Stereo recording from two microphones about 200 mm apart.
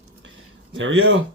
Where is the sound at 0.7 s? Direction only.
70° right (ahead or behind).